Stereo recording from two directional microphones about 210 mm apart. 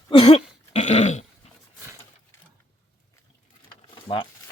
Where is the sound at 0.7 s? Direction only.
35° left (ahead or behind).